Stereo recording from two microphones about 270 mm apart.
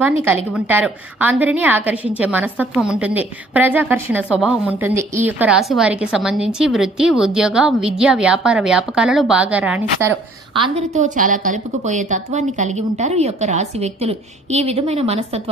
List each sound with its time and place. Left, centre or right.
0.5 s a woman's voice: centre
10.6 s a woman's voice: right